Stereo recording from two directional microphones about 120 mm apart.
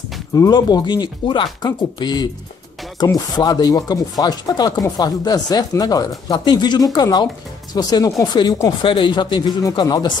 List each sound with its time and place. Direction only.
0.3 s speech: 35° left (ahead or behind)